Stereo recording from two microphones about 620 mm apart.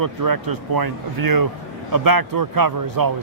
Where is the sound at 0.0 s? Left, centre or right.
Right.